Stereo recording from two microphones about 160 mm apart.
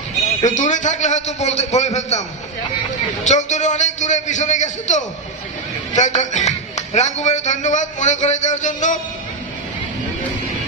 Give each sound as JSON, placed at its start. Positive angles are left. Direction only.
{"t": 0.4, "sound": "a man's voice", "side_deg": 50}
{"t": 3.3, "sound": "a man's voice", "side_deg": 45}